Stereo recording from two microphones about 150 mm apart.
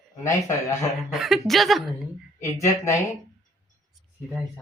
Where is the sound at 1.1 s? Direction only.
Centre (ahead or behind).